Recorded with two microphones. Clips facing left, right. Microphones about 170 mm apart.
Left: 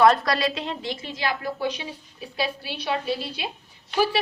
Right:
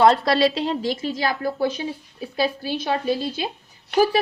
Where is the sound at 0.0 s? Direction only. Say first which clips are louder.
Right 3 dB; 25° right (ahead or behind).